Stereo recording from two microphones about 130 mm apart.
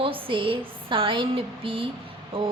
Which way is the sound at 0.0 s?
45° right (ahead or behind).